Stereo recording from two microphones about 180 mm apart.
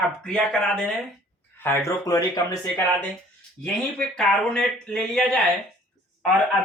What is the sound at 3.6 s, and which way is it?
Speech, 5° left (ahead or behind).